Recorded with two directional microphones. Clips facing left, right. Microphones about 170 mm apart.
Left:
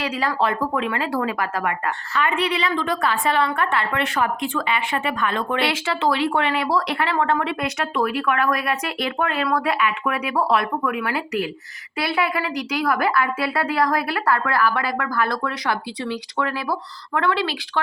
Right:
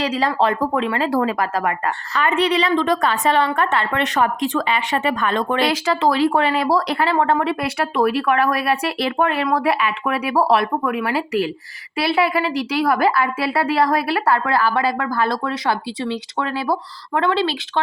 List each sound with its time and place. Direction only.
0.0 s a woman's voice: 35° right (ahead or behind)